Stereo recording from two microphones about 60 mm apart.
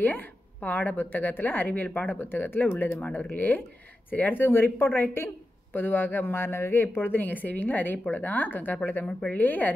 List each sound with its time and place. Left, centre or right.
0.0 s speech: left